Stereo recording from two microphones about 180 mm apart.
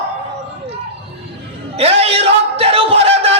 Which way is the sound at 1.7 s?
35° right (ahead or behind).